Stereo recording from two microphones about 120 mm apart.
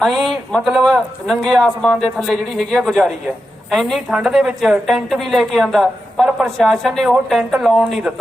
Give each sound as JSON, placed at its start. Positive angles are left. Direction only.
{"t": 0.0, "sound": "a woman's voice", "side_deg": 0}